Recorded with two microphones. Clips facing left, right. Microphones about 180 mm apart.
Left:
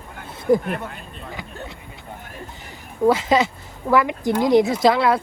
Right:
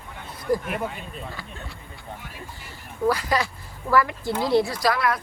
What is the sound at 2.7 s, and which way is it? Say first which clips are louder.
A woman's voice: left 6 dB; 20° left (ahead or behind).